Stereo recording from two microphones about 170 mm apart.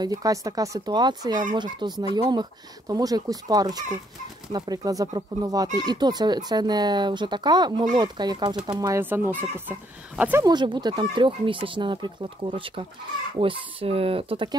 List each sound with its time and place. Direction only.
0.0 s speech: 20° right (ahead or behind)
10.4 s speech: 25° right (ahead or behind)